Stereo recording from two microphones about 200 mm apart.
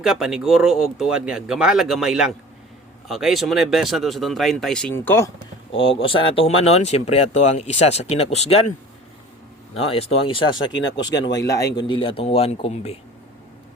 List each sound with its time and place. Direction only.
0.0 s speech: centre (ahead or behind)
5.9 s speech: 25° left (ahead or behind)
9.7 s a man's voice: 30° left (ahead or behind)
10.7 s speech: 65° left (ahead or behind)
11.3 s a man's voice: 15° left (ahead or behind)